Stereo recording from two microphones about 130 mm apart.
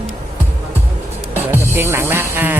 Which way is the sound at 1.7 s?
15° right (ahead or behind).